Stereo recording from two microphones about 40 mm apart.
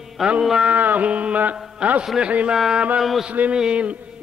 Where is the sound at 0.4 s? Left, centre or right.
Centre.